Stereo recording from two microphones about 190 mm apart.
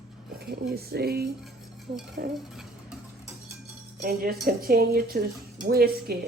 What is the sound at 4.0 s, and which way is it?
Speech, 50° right (ahead or behind).